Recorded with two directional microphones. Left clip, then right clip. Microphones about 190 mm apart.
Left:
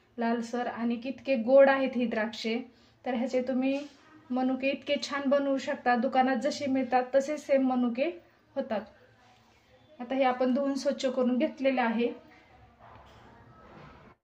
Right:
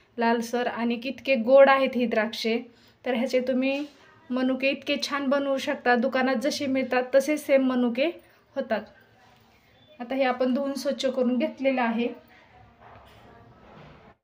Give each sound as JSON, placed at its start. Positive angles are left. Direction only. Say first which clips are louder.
{"t": 0.2, "sound": "speech", "louder": "right 6 dB", "side_deg": -25}
{"t": 8.5, "sound": "a woman's voice", "louder": "right 4 dB", "side_deg": -10}
{"t": 9.9, "sound": "a woman's voice", "louder": "right 2 dB", "side_deg": 0}